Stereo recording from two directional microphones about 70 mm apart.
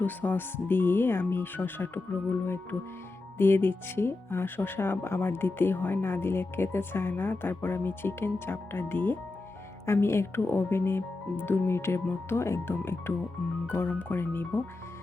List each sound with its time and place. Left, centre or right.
0.0 s speech: left